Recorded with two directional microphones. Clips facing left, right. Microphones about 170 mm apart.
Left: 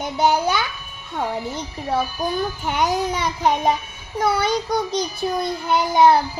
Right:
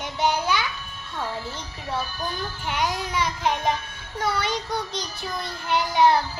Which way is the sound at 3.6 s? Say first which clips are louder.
Left 5 dB; 10° left (ahead or behind).